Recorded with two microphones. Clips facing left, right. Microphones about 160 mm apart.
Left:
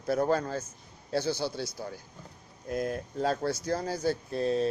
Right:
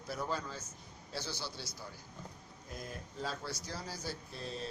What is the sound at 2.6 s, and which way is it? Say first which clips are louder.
Speech: left 15 dB; 65° left (ahead or behind).